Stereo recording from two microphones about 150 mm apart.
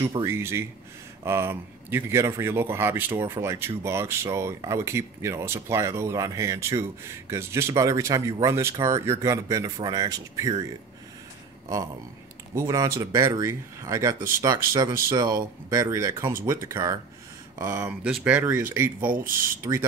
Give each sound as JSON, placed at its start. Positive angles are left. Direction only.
{"t": 0.2, "sound": "speech", "side_deg": -15}
{"t": 12.5, "sound": "speech", "side_deg": -20}
{"t": 17.8, "sound": "speech", "side_deg": -10}
{"t": 19.1, "sound": "speech", "side_deg": -65}
{"t": 19.6, "sound": "speech", "side_deg": -20}